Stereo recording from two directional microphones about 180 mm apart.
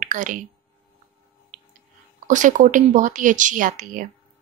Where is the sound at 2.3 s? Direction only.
45° right (ahead or behind).